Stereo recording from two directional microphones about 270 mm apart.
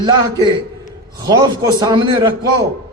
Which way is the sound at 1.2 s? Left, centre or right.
Centre.